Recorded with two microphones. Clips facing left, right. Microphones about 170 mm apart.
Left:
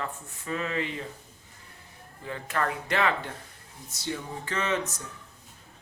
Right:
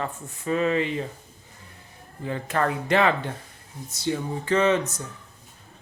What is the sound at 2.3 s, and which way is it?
Speech, 25° right (ahead or behind).